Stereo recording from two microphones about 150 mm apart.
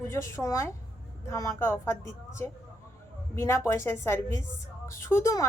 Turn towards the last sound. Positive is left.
turn(degrees=20)  # may be behind; listen again after turning